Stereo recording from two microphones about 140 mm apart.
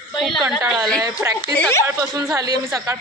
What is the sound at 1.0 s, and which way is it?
Speech, 20° right (ahead or behind).